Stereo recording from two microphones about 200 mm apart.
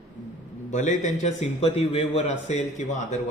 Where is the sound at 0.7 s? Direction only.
35° left (ahead or behind).